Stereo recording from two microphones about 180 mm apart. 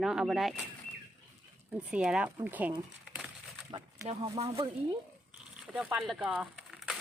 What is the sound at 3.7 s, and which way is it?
Speech, 35° right (ahead or behind).